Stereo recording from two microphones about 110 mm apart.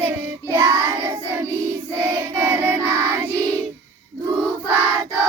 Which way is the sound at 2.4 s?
15° right (ahead or behind).